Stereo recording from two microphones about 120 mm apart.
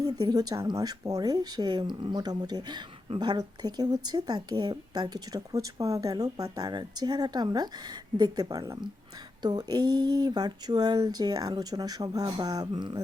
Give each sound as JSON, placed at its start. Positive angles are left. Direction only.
{"t": 0.0, "sound": "speech", "side_deg": -30}